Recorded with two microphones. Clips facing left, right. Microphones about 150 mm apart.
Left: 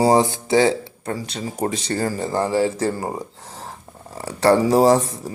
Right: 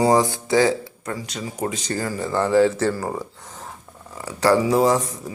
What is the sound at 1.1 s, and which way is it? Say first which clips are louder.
Speech: left 2 dB; 35° left (ahead or behind).